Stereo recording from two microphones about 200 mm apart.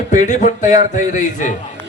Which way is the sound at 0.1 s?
40° left (ahead or behind).